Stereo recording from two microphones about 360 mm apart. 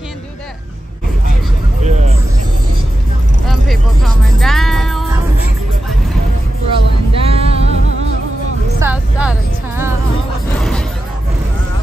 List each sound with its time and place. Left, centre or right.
1.8 s vehicle: centre
3.4 s music: centre
6.7 s vehicle: centre
8.7 s a sound: centre